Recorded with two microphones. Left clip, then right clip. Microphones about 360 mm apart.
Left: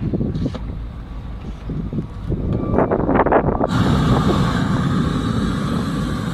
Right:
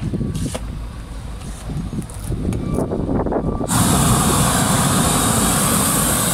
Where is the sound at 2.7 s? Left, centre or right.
Left.